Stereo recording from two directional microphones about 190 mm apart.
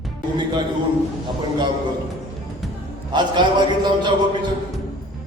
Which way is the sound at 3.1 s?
25° right (ahead or behind).